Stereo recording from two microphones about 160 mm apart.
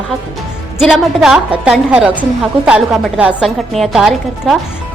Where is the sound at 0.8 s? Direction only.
Centre (ahead or behind).